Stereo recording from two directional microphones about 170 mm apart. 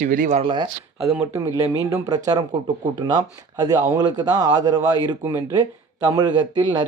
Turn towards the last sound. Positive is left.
turn(degrees=-25)  # may be behind; listen again after turning